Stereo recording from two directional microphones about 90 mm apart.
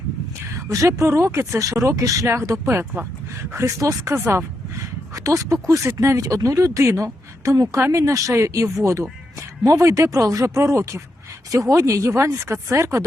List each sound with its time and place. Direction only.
0.7 s speech: 35° right (ahead or behind)